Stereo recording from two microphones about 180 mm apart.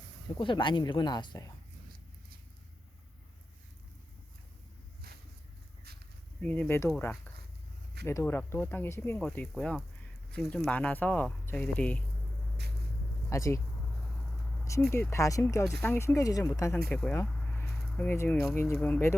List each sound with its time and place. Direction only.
0.3 s speech: 25° left (ahead or behind)
6.4 s speech: 10° left (ahead or behind)
6.9 s speech: 5° left (ahead or behind)
8.0 s speech: 15° left (ahead or behind)
13.3 s speech: 15° left (ahead or behind)
14.7 s speech: 15° left (ahead or behind)
16.9 s a sound: 5° left (ahead or behind)
18.5 s speech: 10° left (ahead or behind)